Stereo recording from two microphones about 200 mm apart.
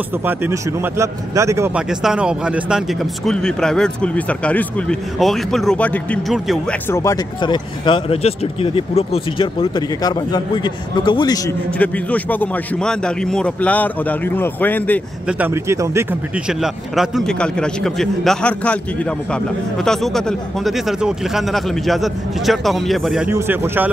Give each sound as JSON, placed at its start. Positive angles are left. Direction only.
{"t": 0.2, "sound": "speech", "side_deg": -10}
{"t": 1.9, "sound": "a man's voice", "side_deg": -5}
{"t": 6.9, "sound": "speech", "side_deg": 15}
{"t": 11.8, "sound": "a man's voice", "side_deg": 10}
{"t": 15.2, "sound": "a man's voice", "side_deg": -10}
{"t": 23.3, "sound": "speech", "side_deg": -10}